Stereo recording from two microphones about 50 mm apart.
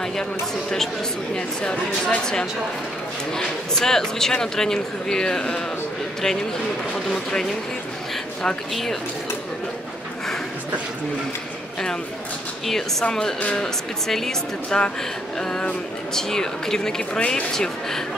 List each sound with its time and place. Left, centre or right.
1.3 s speech: centre
13.0 s speech: centre
16.2 s speech: centre